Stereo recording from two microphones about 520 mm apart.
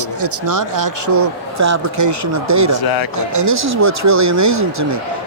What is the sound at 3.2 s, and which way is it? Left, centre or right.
Speech, right.